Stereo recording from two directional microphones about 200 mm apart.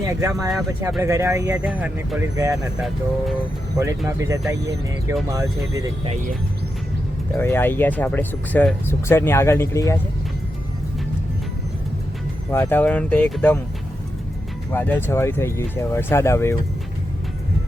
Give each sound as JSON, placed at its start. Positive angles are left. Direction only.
{"t": 0.1, "sound": "speech", "side_deg": -15}
{"t": 3.8, "sound": "speech", "side_deg": -15}
{"t": 7.3, "sound": "speech", "side_deg": 10}
{"t": 12.5, "sound": "speech", "side_deg": 10}
{"t": 14.7, "sound": "speech", "side_deg": 10}